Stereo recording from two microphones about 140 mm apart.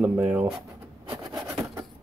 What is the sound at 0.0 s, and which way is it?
Speech, 10° right (ahead or behind).